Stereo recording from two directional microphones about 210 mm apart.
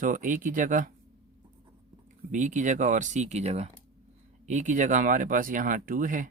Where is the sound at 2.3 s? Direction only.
35° right (ahead or behind).